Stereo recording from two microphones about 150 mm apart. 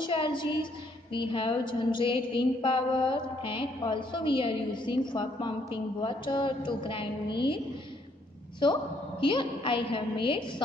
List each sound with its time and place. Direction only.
0.0 s a woman's voice: 35° left (ahead or behind)
9.2 s a woman's voice: 35° left (ahead or behind)